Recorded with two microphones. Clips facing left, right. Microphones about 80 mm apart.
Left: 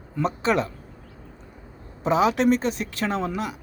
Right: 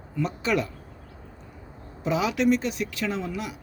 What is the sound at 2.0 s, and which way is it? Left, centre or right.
Speech, left.